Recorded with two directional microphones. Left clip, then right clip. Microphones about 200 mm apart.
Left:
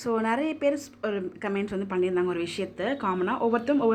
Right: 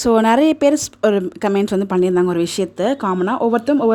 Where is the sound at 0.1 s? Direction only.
65° right (ahead or behind).